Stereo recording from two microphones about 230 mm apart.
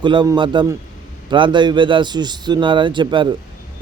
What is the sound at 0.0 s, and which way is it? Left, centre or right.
A man's voice, right.